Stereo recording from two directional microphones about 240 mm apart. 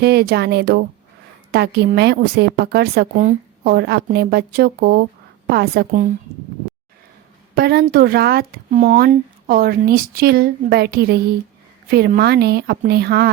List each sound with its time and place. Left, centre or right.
0.0 s speech: right
7.5 s speech: right